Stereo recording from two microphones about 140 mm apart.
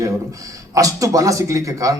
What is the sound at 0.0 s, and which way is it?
A man's voice, 25° right (ahead or behind).